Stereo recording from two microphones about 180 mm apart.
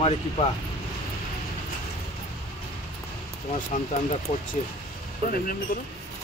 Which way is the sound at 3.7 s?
45° left (ahead or behind).